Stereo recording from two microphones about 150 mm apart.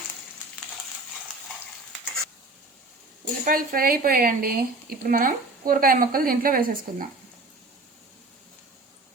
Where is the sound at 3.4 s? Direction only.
70° right (ahead or behind).